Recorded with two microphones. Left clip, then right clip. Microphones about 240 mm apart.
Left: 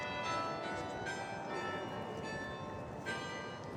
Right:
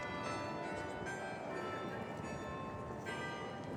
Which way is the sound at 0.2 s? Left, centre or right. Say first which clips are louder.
Left 4 dB; centre.